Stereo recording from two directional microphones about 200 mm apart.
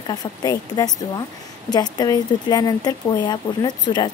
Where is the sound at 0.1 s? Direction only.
20° left (ahead or behind).